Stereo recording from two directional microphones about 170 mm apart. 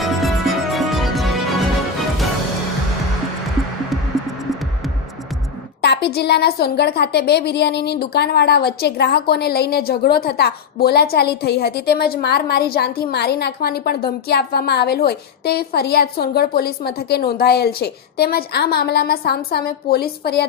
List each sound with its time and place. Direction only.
0.0 s music: centre (ahead or behind)
5.8 s a woman's voice: 75° left (ahead or behind)